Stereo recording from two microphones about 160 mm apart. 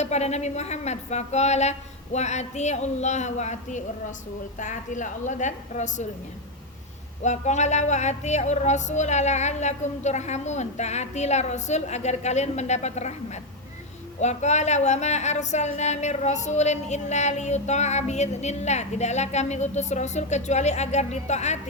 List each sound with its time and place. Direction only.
0.0 s speech: 45° left (ahead or behind)
7.2 s speech: 45° left (ahead or behind)
14.2 s speech: 45° left (ahead or behind)